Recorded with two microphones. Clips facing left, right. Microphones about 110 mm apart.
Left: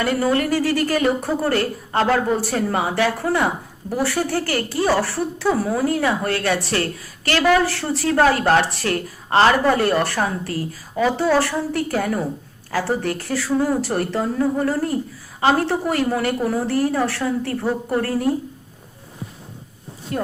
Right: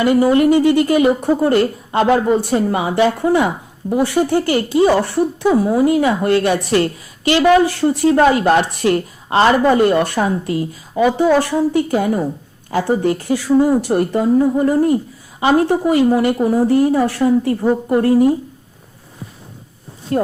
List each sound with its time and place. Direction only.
0.0 s a woman's voice: 15° right (ahead or behind)
20.1 s speech: 35° right (ahead or behind)